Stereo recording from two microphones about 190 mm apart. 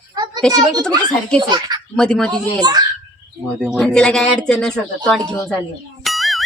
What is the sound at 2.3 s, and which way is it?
Speech, 20° right (ahead or behind).